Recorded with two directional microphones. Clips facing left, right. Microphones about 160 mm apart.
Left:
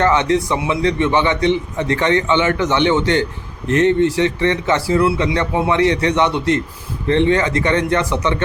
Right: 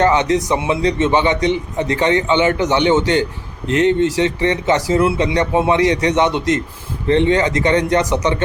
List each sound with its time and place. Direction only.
0.0 s a man's voice: 15° right (ahead or behind)